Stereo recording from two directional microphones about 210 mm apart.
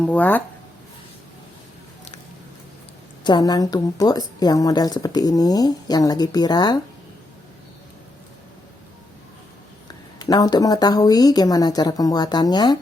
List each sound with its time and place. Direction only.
0.0 s a woman's voice: 5° left (ahead or behind)
3.2 s a woman's voice: 20° left (ahead or behind)
10.2 s speech: 20° left (ahead or behind)